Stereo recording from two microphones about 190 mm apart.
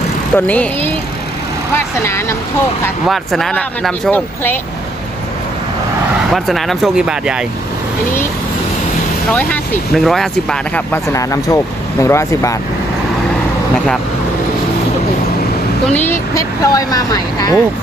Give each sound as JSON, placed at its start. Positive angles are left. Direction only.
{"t": 0.3, "sound": "speech", "side_deg": 10}
{"t": 3.1, "sound": "speech", "side_deg": 0}
{"t": 6.3, "sound": "speech", "side_deg": 0}
{"t": 9.3, "sound": "speech", "side_deg": 5}
{"t": 16.0, "sound": "speech", "side_deg": 10}